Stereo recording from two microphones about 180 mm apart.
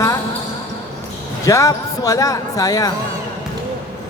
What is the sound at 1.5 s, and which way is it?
Speech, 20° left (ahead or behind).